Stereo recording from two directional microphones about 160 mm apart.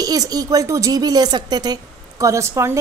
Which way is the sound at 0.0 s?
25° right (ahead or behind).